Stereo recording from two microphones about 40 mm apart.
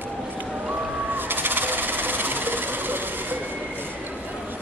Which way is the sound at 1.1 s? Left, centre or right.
Right.